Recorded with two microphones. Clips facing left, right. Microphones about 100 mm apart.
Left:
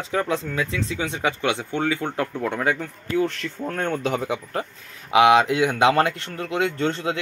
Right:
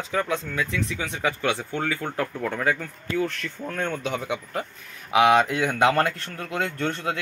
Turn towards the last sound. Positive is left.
turn(degrees=25)  # may be behind; listen again after turning